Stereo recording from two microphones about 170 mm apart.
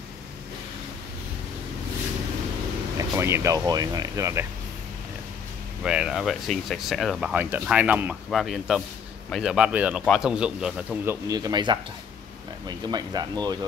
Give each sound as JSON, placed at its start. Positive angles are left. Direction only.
{"t": 3.0, "sound": "speech", "side_deg": -15}
{"t": 5.9, "sound": "speech", "side_deg": -5}
{"t": 11.2, "sound": "speech", "side_deg": -20}